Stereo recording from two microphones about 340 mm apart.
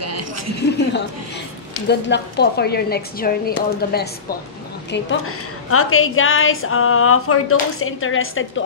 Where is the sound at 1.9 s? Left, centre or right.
Left.